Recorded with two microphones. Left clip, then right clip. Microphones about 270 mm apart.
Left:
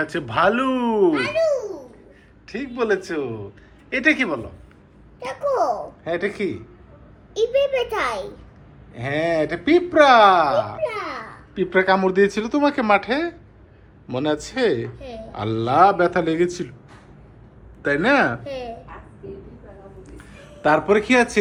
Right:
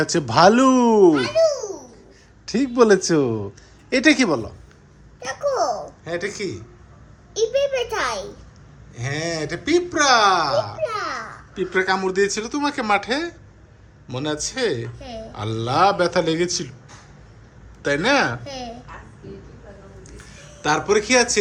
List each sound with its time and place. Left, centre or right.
0.0 s a man's voice: right
2.5 s a man's voice: right
6.1 s speech: centre
17.8 s a man's voice: centre
20.6 s a man's voice: centre